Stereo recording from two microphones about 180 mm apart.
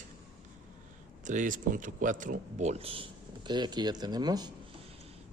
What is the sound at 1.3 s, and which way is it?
Speech, 45° right (ahead or behind).